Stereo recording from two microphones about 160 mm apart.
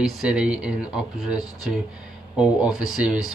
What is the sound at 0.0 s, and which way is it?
Speech, 5° right (ahead or behind).